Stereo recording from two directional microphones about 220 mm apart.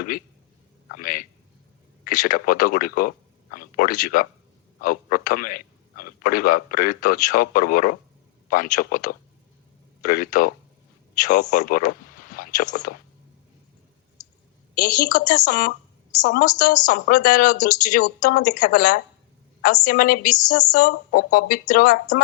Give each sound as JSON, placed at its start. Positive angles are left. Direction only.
{"t": 0.9, "sound": "a man's voice", "side_deg": 40}
{"t": 14.8, "sound": "a man's voice", "side_deg": 35}